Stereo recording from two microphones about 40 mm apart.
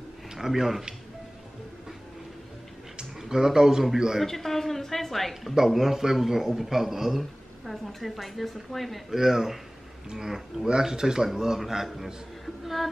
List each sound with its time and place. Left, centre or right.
0.3 s speech: centre
3.2 s a man's voice: centre
4.2 s a man's voice: centre
5.3 s a man's voice: centre